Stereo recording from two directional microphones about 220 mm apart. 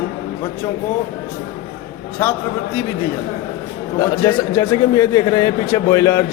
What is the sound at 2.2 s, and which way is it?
Speech, 10° left (ahead or behind).